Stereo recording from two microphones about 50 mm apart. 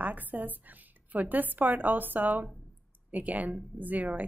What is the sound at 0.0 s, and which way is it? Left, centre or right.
Speech, right.